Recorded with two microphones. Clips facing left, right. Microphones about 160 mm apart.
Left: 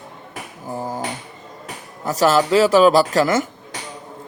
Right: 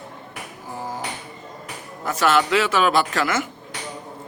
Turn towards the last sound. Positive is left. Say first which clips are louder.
# left 5 dB
turn(degrees=35)  # may be behind; listen again after turning